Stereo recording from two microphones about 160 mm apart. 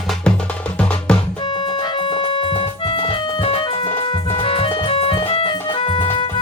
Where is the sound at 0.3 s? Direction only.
5° left (ahead or behind).